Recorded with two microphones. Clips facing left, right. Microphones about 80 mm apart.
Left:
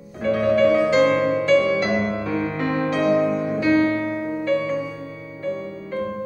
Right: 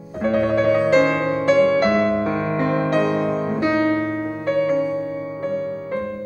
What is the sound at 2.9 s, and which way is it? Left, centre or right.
Music, right.